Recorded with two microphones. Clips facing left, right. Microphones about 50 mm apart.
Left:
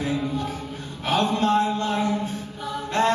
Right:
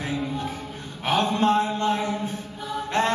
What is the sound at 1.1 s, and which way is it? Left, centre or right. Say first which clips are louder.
Mantra: even; right.